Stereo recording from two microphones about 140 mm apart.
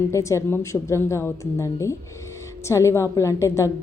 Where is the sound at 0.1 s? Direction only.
20° left (ahead or behind).